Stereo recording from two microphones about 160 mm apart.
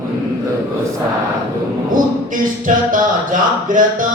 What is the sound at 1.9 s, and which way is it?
Music, 55° right (ahead or behind).